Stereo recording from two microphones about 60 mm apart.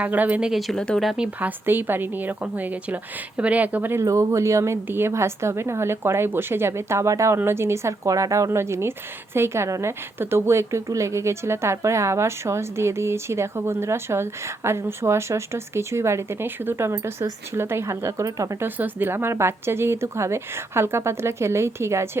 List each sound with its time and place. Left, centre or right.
0.0 s a woman's voice: right
0.8 s speech: centre
1.4 s a woman's voice: right
4.0 s speech: right
4.9 s speech: right
7.3 s speech: right
10.2 s speech: right
18.3 s speech: right
18.6 s speech: right